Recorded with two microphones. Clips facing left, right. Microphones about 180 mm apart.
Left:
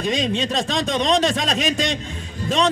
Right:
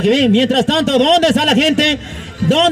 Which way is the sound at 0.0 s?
80° right.